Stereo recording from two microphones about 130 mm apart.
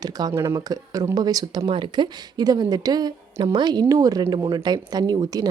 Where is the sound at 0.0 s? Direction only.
30° right (ahead or behind).